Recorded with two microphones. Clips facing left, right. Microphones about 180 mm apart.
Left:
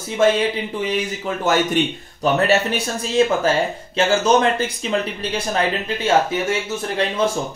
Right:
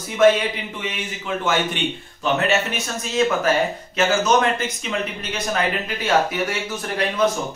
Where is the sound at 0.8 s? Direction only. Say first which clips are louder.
Left 7 dB; 35° left (ahead or behind).